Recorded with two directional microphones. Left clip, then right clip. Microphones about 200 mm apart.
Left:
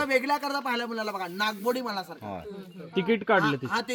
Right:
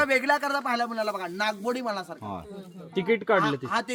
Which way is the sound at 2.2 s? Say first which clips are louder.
Right 1 dB; 70° right (ahead or behind).